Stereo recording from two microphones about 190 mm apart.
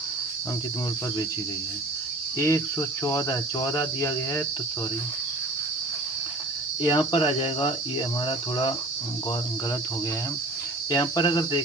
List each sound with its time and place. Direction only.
2.3 s cricket: 15° left (ahead or behind)
6.8 s speech: 20° left (ahead or behind)
10.9 s speech: 20° left (ahead or behind)